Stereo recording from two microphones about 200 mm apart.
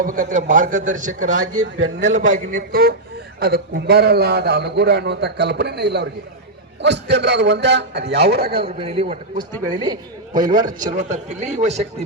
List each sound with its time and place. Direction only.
0.0 s a man's voice: 40° right (ahead or behind)
1.8 s a man's voice: 65° right (ahead or behind)
2.1 s a man's voice: 40° right (ahead or behind)
8.6 s a man's voice: 30° right (ahead or behind)
10.9 s a man's voice: 35° right (ahead or behind)